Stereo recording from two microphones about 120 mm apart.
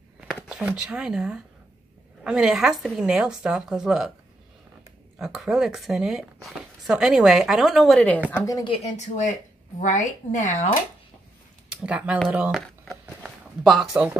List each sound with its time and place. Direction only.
0.3 s speech: 5° right (ahead or behind)
5.2 s speech: 5° right (ahead or behind)
8.6 s speech: 50° left (ahead or behind)
8.9 s speech: 80° left
9.8 s speech: 90° left
11.7 s speech: 10° right (ahead or behind)
12.4 s speech: centre (ahead or behind)
13.2 s a sound: centre (ahead or behind)